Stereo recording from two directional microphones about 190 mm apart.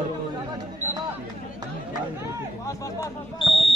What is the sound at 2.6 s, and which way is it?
Speech, 20° left (ahead or behind).